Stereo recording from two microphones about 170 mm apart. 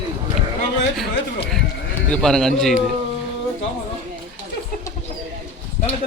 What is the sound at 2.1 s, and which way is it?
Speech, 5° left (ahead or behind).